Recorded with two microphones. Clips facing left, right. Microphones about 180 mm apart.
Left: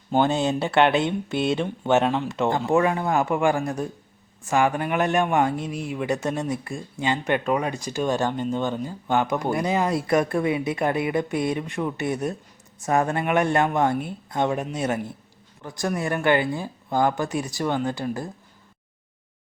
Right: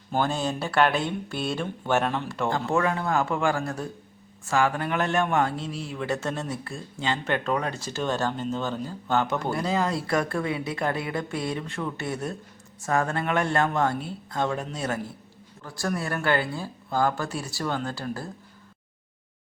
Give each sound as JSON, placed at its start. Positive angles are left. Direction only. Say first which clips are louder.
{"t": 0.1, "sound": "speech", "louder": "left 5 dB", "side_deg": 20}